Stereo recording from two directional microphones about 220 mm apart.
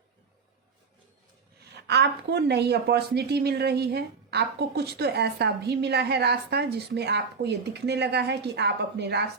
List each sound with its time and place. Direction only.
1.9 s a woman's voice: 50° right (ahead or behind)